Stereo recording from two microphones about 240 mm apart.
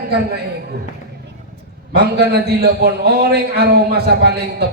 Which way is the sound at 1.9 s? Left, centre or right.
Right.